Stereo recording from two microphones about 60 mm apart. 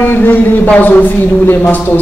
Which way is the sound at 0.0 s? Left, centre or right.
Left.